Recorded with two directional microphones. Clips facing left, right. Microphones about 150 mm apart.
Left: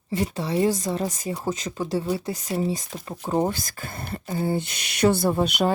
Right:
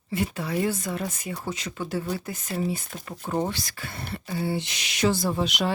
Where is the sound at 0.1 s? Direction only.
35° left (ahead or behind).